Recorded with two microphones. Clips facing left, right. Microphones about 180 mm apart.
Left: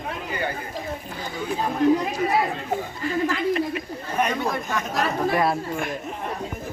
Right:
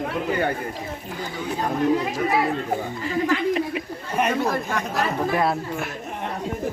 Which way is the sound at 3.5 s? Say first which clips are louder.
Even; 10° right (ahead or behind).